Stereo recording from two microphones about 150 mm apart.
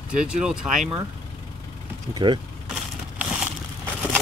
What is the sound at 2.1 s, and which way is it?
Speech, 30° right (ahead or behind).